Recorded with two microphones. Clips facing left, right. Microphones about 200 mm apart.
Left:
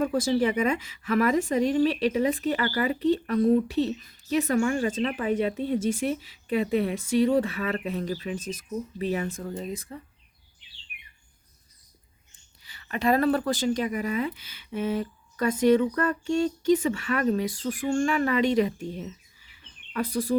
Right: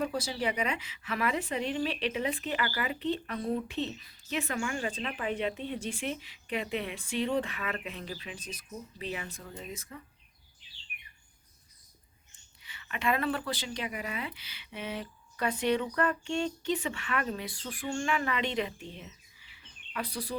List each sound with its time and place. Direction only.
0.0 s a woman's voice: 50° left (ahead or behind)
12.6 s speech: 40° left (ahead or behind)